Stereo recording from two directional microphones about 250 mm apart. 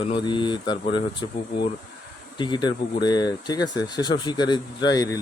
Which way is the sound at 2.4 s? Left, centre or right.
Centre.